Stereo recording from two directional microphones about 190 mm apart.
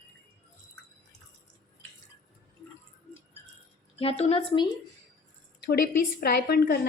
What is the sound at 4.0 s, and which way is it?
Speech, 30° left (ahead or behind).